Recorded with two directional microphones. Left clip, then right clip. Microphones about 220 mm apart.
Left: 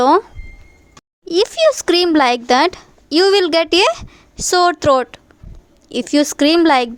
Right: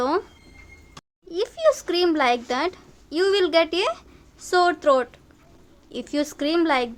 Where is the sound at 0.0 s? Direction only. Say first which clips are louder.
Left 11 dB; 35° left (ahead or behind).